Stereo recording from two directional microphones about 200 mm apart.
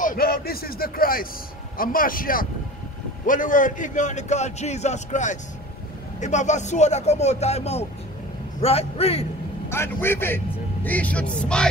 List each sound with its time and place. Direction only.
0.0 s a man's voice: 45° left (ahead or behind); by 9.2 s 30° left (ahead or behind)
9.7 s a man's voice: 10° left (ahead or behind)